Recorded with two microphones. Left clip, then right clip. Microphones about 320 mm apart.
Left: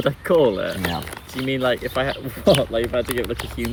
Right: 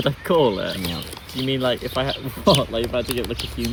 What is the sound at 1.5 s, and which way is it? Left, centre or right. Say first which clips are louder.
Speech: left 1 dB; centre.